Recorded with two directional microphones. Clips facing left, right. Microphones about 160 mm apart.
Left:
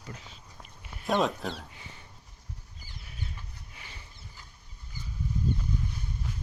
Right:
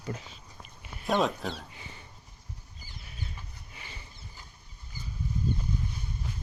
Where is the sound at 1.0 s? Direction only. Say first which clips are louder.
Even; centre (ahead or behind).